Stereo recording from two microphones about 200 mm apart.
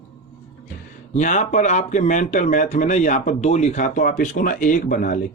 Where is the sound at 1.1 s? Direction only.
35° left (ahead or behind).